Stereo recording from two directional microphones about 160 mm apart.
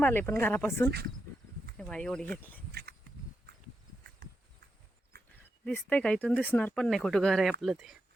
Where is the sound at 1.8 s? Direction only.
5° left (ahead or behind).